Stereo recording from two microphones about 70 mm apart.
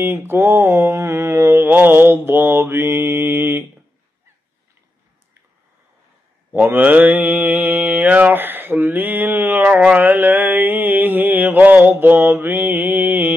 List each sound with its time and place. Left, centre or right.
0.0 s mantra: right
6.5 s mantra: right
9.7 s mantra: centre